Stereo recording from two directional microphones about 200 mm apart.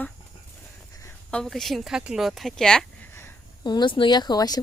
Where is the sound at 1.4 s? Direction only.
Centre (ahead or behind).